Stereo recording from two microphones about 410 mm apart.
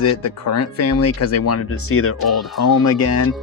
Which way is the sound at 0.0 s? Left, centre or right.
Left.